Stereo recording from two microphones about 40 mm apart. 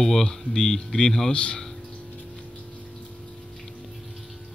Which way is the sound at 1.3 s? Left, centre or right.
Left.